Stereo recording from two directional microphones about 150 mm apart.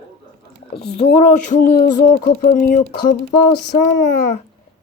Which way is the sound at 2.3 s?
55° left (ahead or behind).